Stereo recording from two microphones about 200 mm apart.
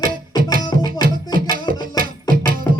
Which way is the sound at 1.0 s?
45° right (ahead or behind).